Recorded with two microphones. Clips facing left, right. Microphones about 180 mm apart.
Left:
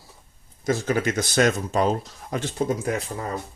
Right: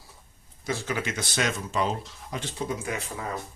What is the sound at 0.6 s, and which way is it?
Speech, 45° left (ahead or behind).